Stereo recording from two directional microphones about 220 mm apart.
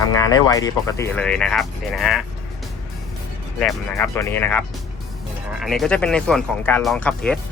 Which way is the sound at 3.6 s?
5° left (ahead or behind).